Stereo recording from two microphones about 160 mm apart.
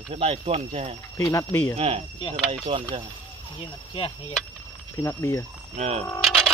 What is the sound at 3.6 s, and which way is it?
Speech, 35° left (ahead or behind).